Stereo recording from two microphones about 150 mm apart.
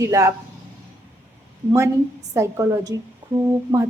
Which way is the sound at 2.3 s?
20° right (ahead or behind).